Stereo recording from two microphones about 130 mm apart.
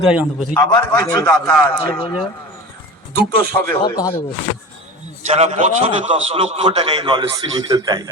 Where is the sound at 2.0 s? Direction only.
40° left (ahead or behind).